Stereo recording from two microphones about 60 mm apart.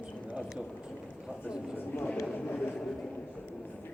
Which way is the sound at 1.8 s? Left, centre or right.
Left.